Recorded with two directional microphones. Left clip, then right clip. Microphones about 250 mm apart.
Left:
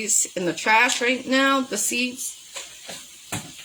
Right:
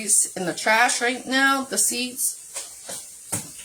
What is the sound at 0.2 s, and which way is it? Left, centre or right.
Speech, centre.